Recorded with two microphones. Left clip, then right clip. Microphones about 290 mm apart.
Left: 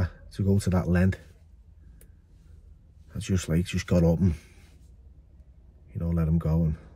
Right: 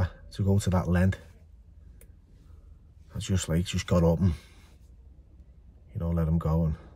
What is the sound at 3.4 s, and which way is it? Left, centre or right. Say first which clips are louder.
Speech: even; centre.